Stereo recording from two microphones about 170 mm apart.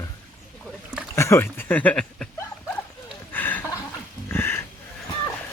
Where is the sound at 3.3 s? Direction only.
10° left (ahead or behind).